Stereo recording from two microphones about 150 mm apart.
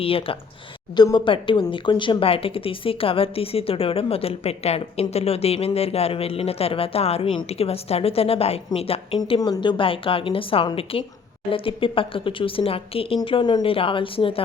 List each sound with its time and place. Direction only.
0.0 s a woman's voice: 40° left (ahead or behind)